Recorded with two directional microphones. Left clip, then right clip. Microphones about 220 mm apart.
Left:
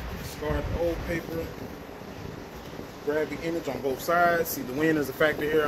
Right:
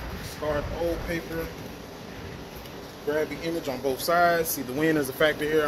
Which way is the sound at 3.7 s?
40° right (ahead or behind).